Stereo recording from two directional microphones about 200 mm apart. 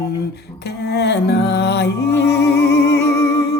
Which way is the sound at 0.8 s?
55° left (ahead or behind).